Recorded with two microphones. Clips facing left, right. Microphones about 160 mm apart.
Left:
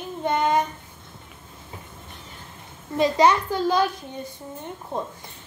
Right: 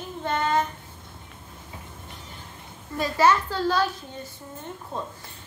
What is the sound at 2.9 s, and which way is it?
Speech, 20° left (ahead or behind).